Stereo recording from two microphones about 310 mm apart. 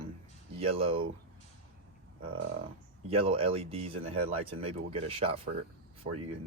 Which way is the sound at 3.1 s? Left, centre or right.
Centre.